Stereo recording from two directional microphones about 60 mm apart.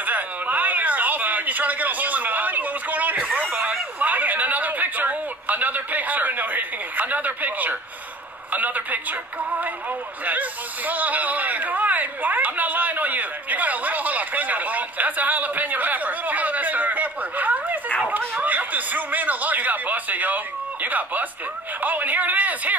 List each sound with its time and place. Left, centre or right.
0.0 s a sound: right
8.5 s a man's voice: right
10.9 s a man's voice: right